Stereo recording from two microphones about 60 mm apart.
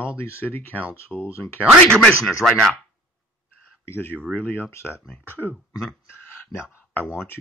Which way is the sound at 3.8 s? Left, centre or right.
Left.